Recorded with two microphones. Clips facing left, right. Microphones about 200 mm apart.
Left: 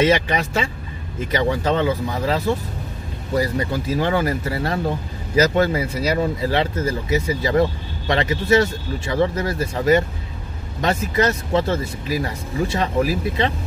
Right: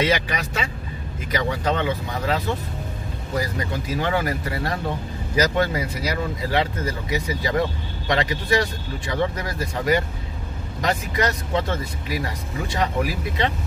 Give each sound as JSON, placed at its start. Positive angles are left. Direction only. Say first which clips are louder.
{"t": 0.0, "sound": "speech", "louder": "left 5 dB", "side_deg": 30}